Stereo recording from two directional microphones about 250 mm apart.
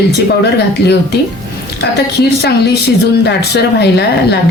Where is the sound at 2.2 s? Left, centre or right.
Left.